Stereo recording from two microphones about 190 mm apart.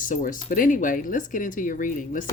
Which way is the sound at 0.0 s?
45° left (ahead or behind).